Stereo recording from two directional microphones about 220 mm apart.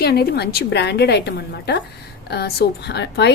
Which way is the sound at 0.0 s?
45° left (ahead or behind).